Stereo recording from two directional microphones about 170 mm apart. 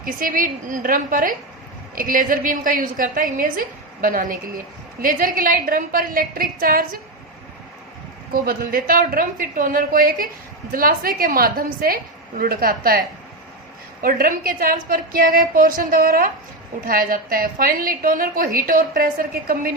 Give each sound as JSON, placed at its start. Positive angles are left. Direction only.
{"t": 0.0, "sound": "a woman's voice", "side_deg": -55}
{"t": 8.3, "sound": "a woman's voice", "side_deg": -55}
{"t": 14.0, "sound": "a woman's voice", "side_deg": -55}